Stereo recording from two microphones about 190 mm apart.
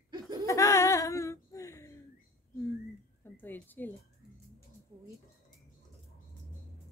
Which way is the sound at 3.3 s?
10° left (ahead or behind).